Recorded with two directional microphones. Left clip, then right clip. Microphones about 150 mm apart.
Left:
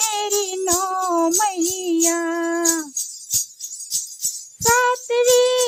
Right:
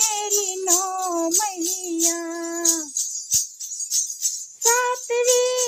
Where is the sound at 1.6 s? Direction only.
45° left (ahead or behind).